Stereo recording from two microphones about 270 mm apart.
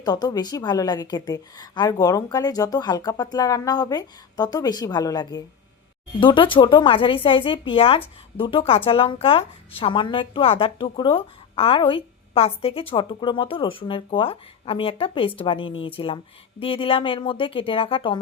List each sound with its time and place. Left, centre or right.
0.0 s a woman's voice: centre